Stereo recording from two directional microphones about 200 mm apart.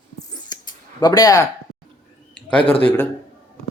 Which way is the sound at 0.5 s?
20° left (ahead or behind).